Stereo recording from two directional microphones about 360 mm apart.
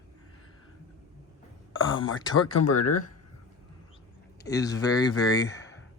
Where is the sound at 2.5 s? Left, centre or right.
Left.